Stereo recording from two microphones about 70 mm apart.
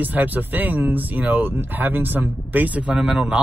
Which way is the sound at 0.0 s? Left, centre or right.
Right.